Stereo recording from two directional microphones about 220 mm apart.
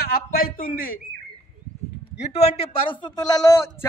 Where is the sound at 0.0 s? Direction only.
45° left (ahead or behind).